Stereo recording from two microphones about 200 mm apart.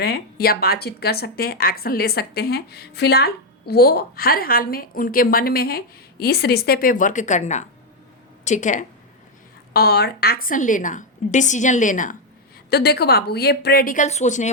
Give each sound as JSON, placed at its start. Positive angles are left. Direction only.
{"t": 0.0, "sound": "a woman's voice", "side_deg": 50}
{"t": 9.7, "sound": "a woman's voice", "side_deg": 50}
{"t": 12.7, "sound": "speech", "side_deg": 55}